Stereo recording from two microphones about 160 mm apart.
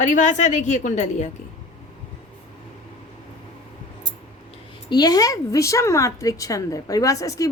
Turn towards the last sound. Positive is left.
turn(degrees=20)  # may be behind; listen again after turning